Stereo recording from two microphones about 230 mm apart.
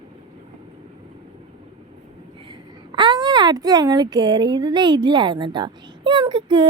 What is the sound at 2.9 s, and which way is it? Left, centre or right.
Speech, centre.